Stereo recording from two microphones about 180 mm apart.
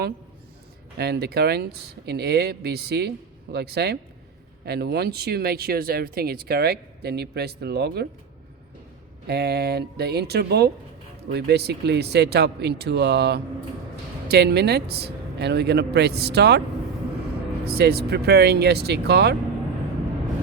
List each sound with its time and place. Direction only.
0.9 s speech: 65° right (ahead or behind)
9.2 s speech: 65° right (ahead or behind)
17.7 s speech: 60° right (ahead or behind)